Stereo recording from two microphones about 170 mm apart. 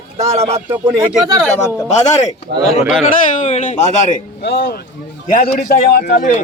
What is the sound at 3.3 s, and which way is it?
Speech, 45° left (ahead or behind).